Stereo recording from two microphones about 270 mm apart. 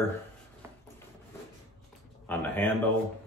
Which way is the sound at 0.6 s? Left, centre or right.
Centre.